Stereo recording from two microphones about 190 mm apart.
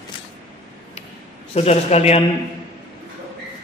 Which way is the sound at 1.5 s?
35° left (ahead or behind).